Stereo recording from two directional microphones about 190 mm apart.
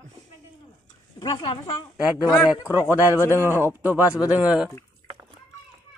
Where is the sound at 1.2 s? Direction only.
20° left (ahead or behind).